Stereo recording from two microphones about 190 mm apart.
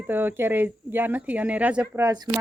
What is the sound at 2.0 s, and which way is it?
Speech, 20° right (ahead or behind).